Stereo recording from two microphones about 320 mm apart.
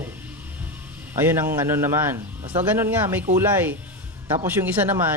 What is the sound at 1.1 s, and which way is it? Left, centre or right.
A man's voice, centre.